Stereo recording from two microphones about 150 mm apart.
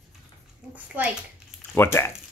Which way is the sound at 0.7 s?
10° right (ahead or behind).